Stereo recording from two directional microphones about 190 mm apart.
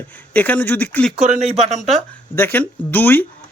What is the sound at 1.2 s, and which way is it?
Speech, 35° right (ahead or behind).